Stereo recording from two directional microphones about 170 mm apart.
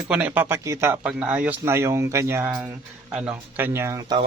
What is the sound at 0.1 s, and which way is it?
Speech, 10° right (ahead or behind).